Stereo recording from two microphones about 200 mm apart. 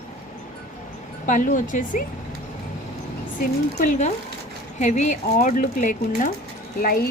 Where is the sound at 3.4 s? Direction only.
40° left (ahead or behind).